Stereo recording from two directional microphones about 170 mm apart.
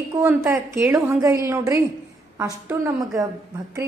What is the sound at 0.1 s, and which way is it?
A woman's voice, 15° right (ahead or behind).